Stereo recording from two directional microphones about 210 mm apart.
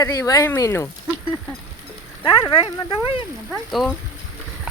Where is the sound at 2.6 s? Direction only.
25° left (ahead or behind).